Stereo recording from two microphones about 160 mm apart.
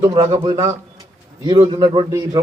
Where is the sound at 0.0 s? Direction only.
35° right (ahead or behind).